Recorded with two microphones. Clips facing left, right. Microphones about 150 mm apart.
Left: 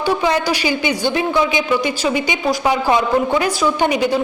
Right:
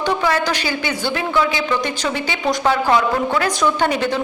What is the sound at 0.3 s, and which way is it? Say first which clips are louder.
A woman's voice: left 2 dB; 15° left (ahead or behind).